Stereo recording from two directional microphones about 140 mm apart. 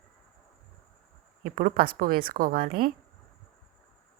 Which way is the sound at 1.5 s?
90° right.